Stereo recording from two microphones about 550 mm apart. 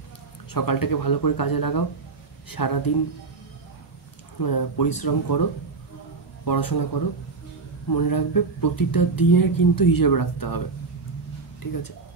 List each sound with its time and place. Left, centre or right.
0.5 s speech: left
4.4 s speech: left
11.6 s speech: left